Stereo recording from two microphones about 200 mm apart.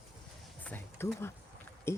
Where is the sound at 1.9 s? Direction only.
10° left (ahead or behind).